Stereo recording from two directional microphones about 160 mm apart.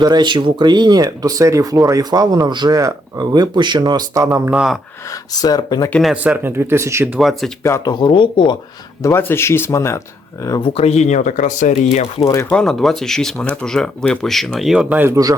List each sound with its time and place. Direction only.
0.0 s speech: 25° right (ahead or behind)
4.5 s speech: 5° right (ahead or behind)
5.3 s speech: 25° left (ahead or behind)
5.9 s speech: centre (ahead or behind); by 7.1 s 15° right (ahead or behind)
7.2 s speech: centre (ahead or behind)
7.6 s speech: 20° left (ahead or behind)
9.0 s speech: 15° left (ahead or behind)
10.7 s speech: 40° left (ahead or behind)
12.2 s speech: 20° left (ahead or behind)
12.5 s speech: 5° left (ahead or behind); by 15.4 s 20° right (ahead or behind)